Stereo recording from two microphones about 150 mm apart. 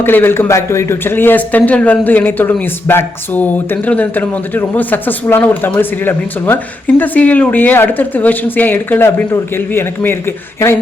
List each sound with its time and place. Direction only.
0.0 s a man's voice: 15° left (ahead or behind)